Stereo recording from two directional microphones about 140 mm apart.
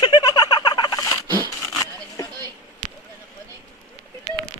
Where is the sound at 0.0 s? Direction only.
35° left (ahead or behind).